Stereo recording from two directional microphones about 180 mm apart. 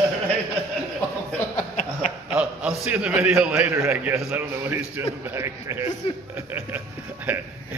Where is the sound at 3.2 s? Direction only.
5° right (ahead or behind).